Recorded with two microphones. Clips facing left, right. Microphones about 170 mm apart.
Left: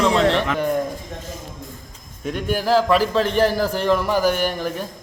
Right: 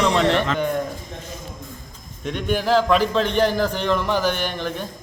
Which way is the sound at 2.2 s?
5° left (ahead or behind).